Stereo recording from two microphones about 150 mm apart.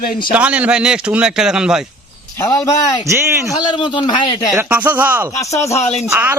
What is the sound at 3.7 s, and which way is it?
Speech, 30° left (ahead or behind).